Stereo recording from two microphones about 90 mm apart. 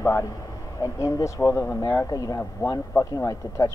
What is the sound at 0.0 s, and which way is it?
Speech, 35° left (ahead or behind).